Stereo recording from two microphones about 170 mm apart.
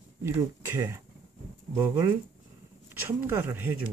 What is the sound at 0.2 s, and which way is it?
Speech, 15° right (ahead or behind).